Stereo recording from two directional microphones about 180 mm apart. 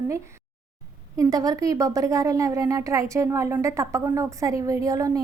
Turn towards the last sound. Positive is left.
turn(degrees=-20)  # may be behind; listen again after turning